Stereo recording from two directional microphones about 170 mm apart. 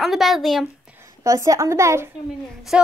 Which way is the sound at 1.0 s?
20° right (ahead or behind).